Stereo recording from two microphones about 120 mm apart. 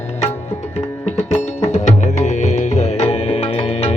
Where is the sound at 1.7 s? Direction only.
70° left (ahead or behind).